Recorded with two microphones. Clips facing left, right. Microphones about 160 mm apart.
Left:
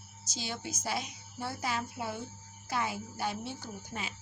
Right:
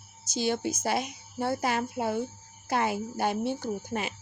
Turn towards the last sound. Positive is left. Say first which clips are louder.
# right 10 dB
turn(degrees=-60)  # may be behind; listen again after turning